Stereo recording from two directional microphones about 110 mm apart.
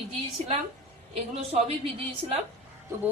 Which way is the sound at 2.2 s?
65° right (ahead or behind).